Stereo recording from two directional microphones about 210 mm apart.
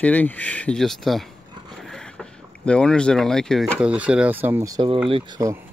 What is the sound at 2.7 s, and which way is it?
Speech, 5° left (ahead or behind).